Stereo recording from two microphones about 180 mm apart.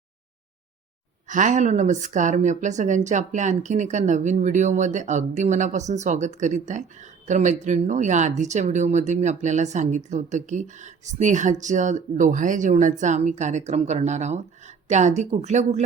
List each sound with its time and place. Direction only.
1.3 s speech: 45° right (ahead or behind)